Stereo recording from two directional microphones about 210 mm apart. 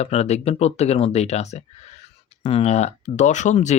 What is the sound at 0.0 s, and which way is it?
Speech, 30° left (ahead or behind).